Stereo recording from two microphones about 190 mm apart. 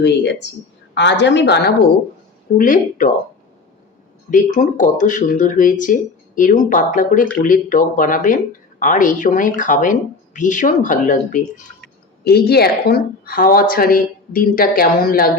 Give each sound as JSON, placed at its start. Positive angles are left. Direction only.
{"t": 0.0, "sound": "a woman's voice", "side_deg": 65}
{"t": 2.6, "sound": "a woman's voice", "side_deg": 45}
{"t": 4.3, "sound": "a woman's voice", "side_deg": 45}
{"t": 12.2, "sound": "a woman's voice", "side_deg": 55}